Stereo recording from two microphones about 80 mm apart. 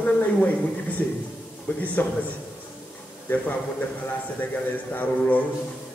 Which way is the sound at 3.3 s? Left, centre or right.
Left.